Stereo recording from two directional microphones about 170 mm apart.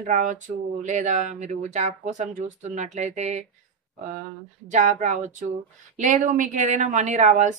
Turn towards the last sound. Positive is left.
turn(degrees=-45)  # may be behind; listen again after turning